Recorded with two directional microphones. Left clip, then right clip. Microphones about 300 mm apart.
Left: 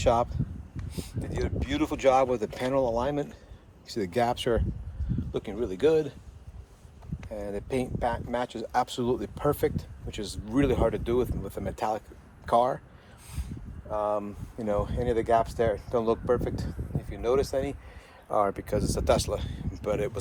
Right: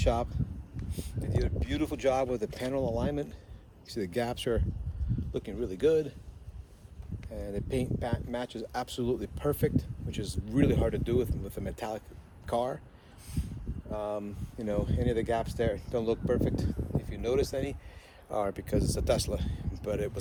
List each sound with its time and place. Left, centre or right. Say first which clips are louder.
0.0 s speech: left 6 dB; centre
7.3 s speech: left 3 dB; centre
13.9 s speech: left 6 dB; centre